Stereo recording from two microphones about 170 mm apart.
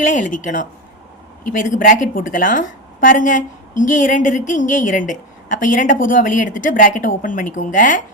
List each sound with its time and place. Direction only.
0.0 s a woman's voice: 50° left (ahead or behind)